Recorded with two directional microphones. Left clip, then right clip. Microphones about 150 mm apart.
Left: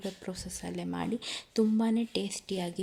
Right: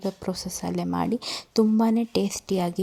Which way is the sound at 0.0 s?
35° right (ahead or behind).